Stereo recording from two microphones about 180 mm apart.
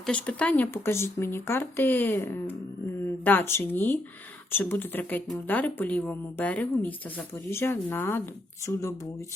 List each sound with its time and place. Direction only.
0.0 s speech: 5° left (ahead or behind)